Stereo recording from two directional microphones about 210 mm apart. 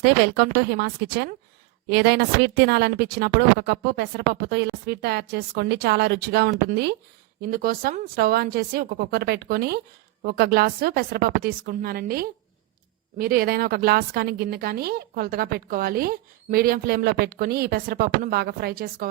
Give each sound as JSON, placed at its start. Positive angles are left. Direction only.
{"t": 0.0, "sound": "a woman's voice", "side_deg": -50}